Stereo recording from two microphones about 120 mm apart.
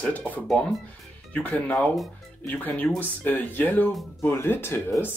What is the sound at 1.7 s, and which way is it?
Speech, centre (ahead or behind).